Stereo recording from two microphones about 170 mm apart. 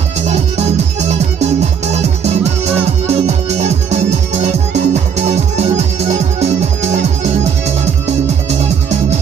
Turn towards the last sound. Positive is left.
turn(degrees=-40)  # may be behind; listen again after turning